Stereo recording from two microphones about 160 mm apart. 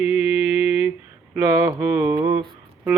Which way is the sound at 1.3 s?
10° right (ahead or behind).